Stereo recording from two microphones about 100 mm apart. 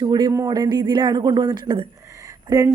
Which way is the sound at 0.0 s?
45° right (ahead or behind).